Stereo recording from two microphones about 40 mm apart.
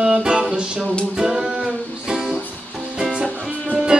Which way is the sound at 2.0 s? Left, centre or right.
Centre.